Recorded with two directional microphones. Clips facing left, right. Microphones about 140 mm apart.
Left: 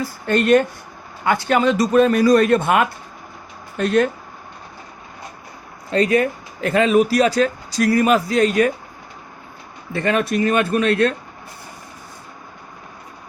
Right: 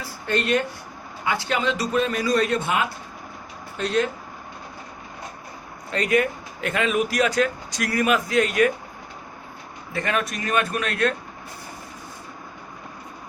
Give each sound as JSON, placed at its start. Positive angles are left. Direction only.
{"t": 0.0, "sound": "speech", "side_deg": 45}
{"t": 5.9, "sound": "speech", "side_deg": 30}
{"t": 9.9, "sound": "speech", "side_deg": 35}